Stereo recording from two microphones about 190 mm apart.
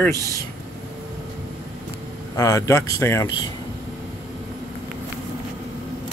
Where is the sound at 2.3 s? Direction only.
15° left (ahead or behind).